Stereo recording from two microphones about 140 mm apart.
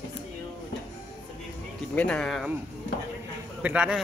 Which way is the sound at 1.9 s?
10° left (ahead or behind).